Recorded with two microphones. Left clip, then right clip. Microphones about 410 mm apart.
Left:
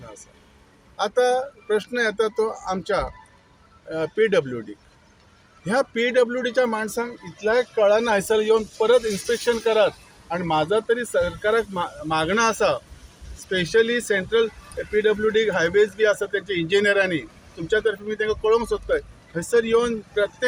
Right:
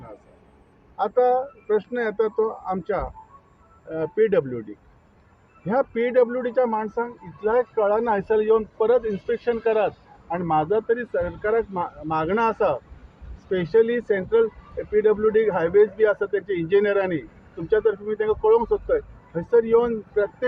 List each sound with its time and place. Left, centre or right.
0.9 s speech: right
5.6 s a man's voice: right